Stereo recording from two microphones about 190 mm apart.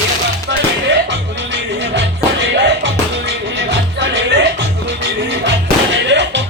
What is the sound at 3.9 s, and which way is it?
Music, 70° right (ahead or behind).